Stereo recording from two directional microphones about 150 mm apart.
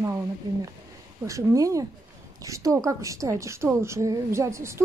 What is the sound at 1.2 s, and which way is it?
A woman's voice, 20° right (ahead or behind).